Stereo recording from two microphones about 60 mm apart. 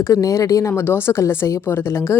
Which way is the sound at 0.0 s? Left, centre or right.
Left.